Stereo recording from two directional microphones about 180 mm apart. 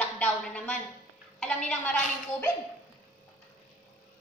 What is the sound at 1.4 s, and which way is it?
Speech, 5° left (ahead or behind).